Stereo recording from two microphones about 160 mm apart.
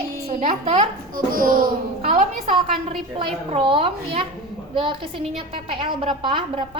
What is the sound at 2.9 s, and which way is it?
A woman's voice, 35° right (ahead or behind).